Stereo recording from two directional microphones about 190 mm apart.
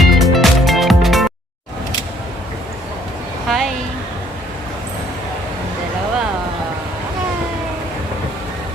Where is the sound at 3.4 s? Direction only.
Centre (ahead or behind).